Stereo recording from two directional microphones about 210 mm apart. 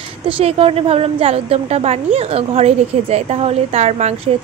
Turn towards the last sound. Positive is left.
turn(degrees=-30)  # may be behind; listen again after turning